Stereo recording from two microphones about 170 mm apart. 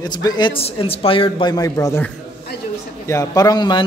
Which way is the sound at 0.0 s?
25° left (ahead or behind).